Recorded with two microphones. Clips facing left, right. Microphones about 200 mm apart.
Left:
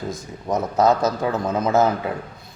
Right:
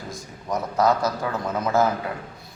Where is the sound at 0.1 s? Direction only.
20° left (ahead or behind).